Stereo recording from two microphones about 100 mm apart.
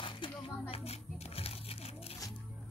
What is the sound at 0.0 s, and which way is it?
Music, 60° left (ahead or behind).